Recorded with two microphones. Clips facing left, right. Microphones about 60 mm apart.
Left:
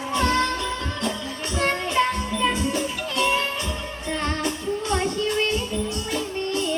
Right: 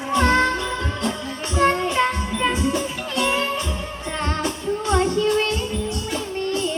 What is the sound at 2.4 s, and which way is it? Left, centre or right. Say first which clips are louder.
Music: right 2 dB; right.